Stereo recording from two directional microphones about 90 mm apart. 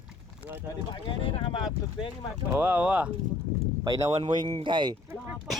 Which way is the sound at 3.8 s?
50° right (ahead or behind).